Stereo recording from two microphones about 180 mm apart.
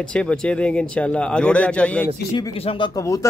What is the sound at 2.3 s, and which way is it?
Speech, 30° left (ahead or behind).